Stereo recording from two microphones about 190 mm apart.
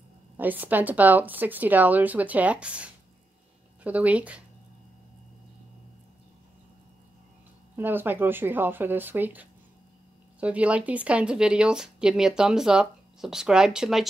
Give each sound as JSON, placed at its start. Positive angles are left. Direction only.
{"t": 0.4, "sound": "a woman's voice", "side_deg": -10}
{"t": 7.7, "sound": "a woman's voice", "side_deg": -10}